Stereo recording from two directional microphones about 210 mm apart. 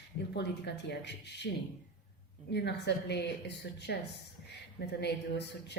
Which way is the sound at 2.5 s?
55° left (ahead or behind).